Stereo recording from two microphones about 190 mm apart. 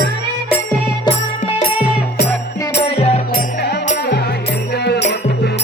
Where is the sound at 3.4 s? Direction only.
55° left (ahead or behind).